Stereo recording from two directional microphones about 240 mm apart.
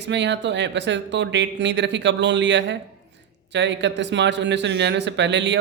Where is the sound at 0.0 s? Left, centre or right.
Right.